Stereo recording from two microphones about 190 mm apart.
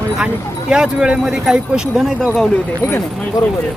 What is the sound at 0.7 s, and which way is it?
Speech, 5° right (ahead or behind).